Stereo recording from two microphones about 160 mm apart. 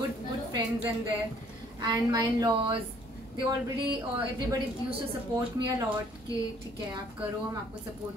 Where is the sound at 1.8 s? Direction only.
25° right (ahead or behind).